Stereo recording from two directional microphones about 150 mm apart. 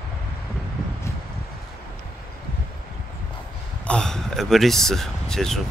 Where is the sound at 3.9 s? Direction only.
5° left (ahead or behind).